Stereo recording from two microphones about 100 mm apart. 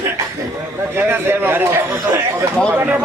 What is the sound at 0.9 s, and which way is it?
A man's voice, 25° right (ahead or behind).